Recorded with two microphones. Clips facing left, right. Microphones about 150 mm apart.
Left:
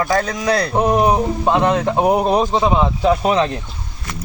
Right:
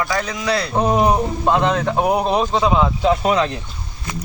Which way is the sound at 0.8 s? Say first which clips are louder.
Even; 5° left (ahead or behind).